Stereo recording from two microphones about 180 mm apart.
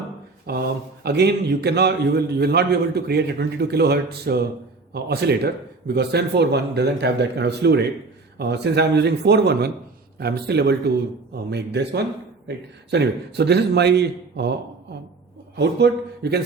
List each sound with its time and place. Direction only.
0.4 s a man's voice: 60° right (ahead or behind)
15.5 s a man's voice: 65° right (ahead or behind)